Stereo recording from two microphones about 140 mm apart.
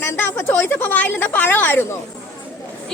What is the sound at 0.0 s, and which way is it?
A woman's voice, 15° left (ahead or behind).